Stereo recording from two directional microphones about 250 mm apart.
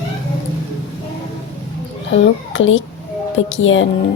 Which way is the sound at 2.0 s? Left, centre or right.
Left.